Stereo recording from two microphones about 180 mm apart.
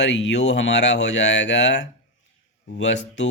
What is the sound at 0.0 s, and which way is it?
Speech, 85° left.